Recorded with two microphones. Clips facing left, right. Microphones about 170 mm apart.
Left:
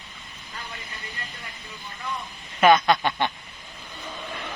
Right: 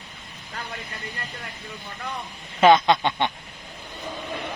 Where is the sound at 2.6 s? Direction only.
25° right (ahead or behind).